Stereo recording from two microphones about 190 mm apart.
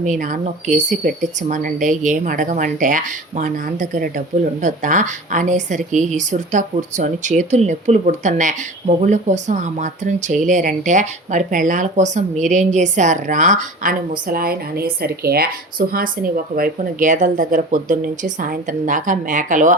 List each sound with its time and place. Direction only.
0.0 s speech: 40° right (ahead or behind)